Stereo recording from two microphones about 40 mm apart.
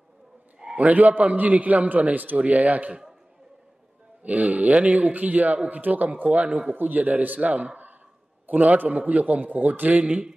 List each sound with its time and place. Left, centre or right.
0.7 s a man's voice: right
4.2 s a man's voice: right
6.7 s a man's voice: right
7.3 s a man's voice: right
8.5 s a man's voice: right